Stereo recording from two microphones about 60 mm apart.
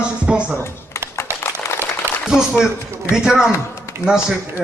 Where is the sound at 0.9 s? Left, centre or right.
Left.